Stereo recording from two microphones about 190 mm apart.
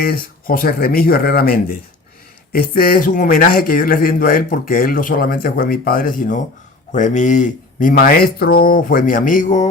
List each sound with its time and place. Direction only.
0.0 s speech: 50° left (ahead or behind)